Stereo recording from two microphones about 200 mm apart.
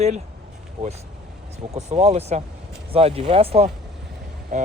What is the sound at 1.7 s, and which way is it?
Speech, 30° right (ahead or behind).